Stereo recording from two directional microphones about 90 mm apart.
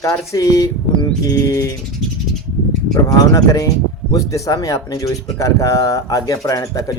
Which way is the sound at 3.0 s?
40° left (ahead or behind).